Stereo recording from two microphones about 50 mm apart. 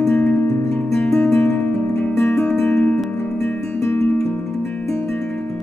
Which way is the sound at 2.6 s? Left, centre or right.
Left.